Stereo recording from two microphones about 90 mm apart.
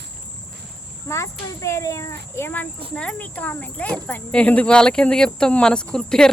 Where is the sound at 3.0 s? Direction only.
15° left (ahead or behind).